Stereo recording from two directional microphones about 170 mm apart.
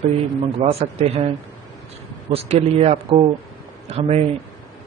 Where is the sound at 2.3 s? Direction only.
40° right (ahead or behind).